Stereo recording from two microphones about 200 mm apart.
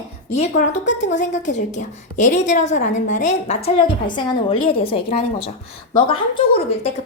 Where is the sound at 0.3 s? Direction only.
35° left (ahead or behind).